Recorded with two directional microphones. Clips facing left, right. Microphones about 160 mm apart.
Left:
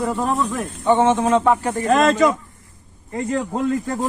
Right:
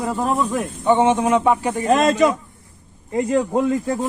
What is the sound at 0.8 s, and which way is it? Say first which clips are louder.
A man's voice: even; 15° right (ahead or behind).